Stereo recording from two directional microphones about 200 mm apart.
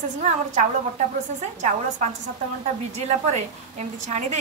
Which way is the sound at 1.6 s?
35° right (ahead or behind).